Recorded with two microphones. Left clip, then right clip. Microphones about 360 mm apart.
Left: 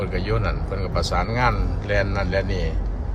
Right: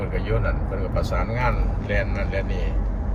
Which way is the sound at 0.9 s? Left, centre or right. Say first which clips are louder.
Left 4 dB; left.